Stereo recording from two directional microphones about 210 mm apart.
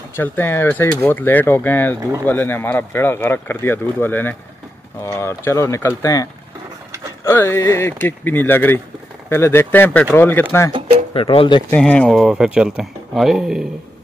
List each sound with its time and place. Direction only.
0.1 s speech: 10° left (ahead or behind)
7.2 s speech: 10° left (ahead or behind)
10.7 s a sound: 30° right (ahead or behind)
11.1 s speech: 25° left (ahead or behind)
11.7 s speech: 5° left (ahead or behind)